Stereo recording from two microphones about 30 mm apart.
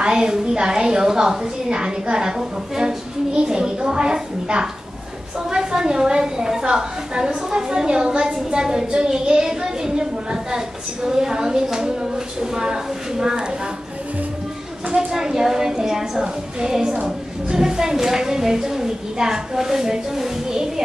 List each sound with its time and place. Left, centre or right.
0.0 s a woman's voice: right
14.9 s a woman's voice: right